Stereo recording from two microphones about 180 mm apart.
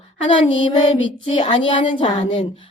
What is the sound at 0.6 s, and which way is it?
Speech, 25° left (ahead or behind).